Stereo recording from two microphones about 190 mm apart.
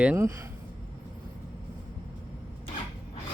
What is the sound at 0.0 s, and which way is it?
Speech, 10° right (ahead or behind).